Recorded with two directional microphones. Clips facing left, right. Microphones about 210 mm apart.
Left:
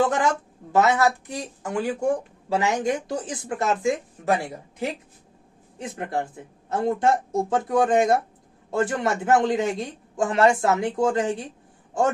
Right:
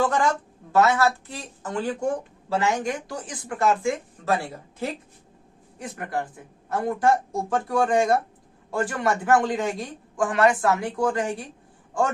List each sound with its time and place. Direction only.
0.7 s speech: 20° left (ahead or behind)